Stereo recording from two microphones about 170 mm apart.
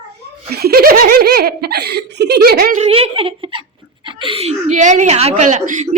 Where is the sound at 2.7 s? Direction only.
40° right (ahead or behind).